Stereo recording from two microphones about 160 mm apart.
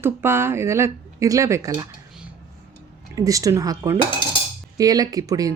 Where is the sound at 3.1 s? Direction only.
20° right (ahead or behind).